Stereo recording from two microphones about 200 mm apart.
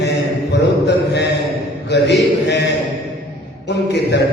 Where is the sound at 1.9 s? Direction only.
60° left (ahead or behind).